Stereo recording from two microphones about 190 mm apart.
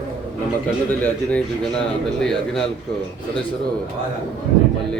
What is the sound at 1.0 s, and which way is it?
Speech, 5° left (ahead or behind).